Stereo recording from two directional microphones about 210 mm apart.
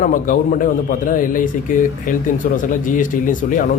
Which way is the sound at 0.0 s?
40° left (ahead or behind).